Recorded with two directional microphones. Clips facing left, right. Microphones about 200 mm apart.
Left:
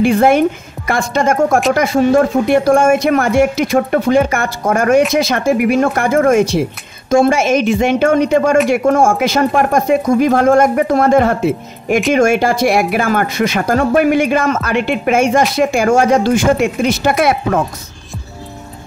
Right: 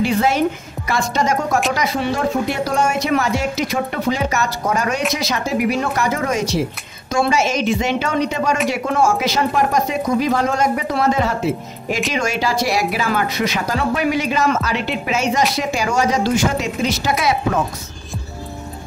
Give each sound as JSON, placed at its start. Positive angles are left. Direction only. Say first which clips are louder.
{"t": 0.0, "sound": "speech", "louder": "left 6 dB", "side_deg": 55}